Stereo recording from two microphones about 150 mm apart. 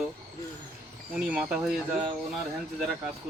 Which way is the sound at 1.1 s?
5° right (ahead or behind).